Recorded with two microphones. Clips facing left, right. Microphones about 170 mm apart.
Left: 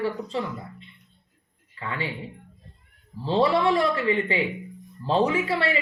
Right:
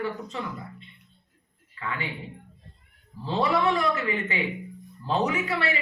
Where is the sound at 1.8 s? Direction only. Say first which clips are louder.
Left 2 dB; 30° left (ahead or behind).